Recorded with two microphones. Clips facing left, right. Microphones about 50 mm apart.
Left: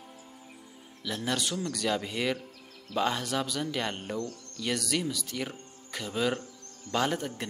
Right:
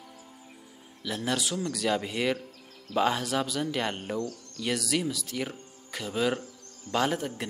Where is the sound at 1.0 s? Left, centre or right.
Centre.